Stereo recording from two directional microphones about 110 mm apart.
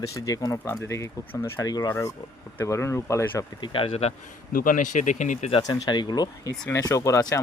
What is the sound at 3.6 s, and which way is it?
Speech, 55° left (ahead or behind).